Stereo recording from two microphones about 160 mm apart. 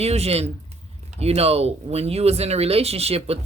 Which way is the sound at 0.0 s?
40° right (ahead or behind).